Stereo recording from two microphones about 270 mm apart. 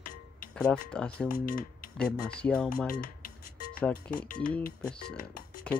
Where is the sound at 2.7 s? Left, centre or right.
Left.